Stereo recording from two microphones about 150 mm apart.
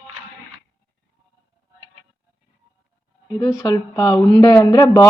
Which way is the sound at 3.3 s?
25° left (ahead or behind).